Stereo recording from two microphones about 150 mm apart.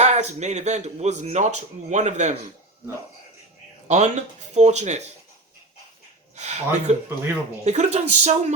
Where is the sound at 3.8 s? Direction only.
50° right (ahead or behind).